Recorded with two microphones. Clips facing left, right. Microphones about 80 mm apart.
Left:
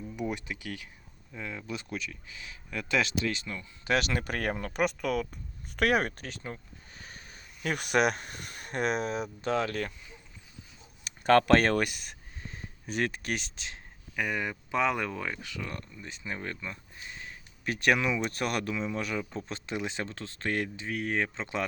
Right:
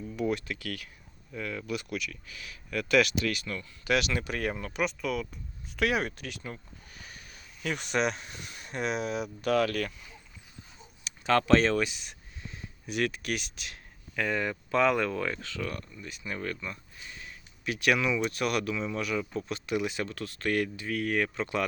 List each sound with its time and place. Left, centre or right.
0.2 s speech: centre
3.8 s speech: left
11.0 s speech: left
14.2 s speech: centre